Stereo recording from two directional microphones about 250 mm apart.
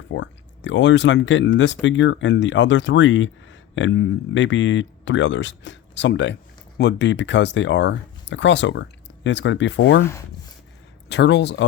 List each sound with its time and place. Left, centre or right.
0.1 s speech: left
11.1 s speech: left